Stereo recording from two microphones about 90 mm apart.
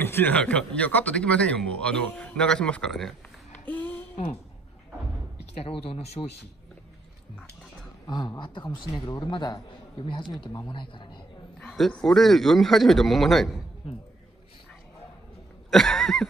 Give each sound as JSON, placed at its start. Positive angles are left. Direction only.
{"t": 0.0, "sound": "speech", "side_deg": 25}
{"t": 0.4, "sound": "a man's voice", "side_deg": 10}
{"t": 3.6, "sound": "a sound", "side_deg": 20}
{"t": 5.7, "sound": "speech", "side_deg": 90}
{"t": 8.4, "sound": "a man's voice", "side_deg": 60}
{"t": 11.6, "sound": "speech", "side_deg": 5}
{"t": 15.7, "sound": "speech", "side_deg": 5}